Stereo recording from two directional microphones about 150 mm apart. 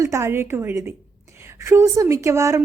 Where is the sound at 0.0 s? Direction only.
20° right (ahead or behind).